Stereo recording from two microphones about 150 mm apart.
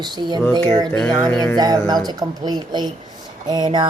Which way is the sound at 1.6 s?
25° right (ahead or behind).